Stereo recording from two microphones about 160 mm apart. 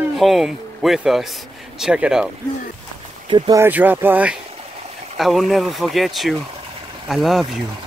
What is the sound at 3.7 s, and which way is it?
Speech, 10° right (ahead or behind).